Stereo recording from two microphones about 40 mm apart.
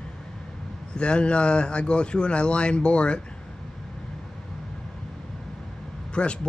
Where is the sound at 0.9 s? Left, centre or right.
Left.